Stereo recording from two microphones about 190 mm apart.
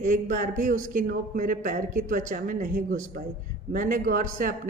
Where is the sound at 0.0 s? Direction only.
40° right (ahead or behind).